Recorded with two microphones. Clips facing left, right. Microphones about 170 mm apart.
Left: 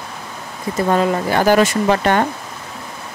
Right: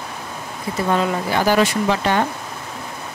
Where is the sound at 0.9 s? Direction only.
45° left (ahead or behind).